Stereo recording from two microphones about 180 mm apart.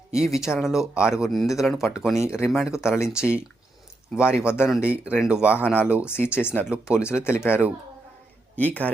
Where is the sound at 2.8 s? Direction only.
15° left (ahead or behind).